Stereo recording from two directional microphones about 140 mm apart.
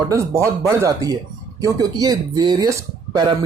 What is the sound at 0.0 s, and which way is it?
Speech, 20° right (ahead or behind).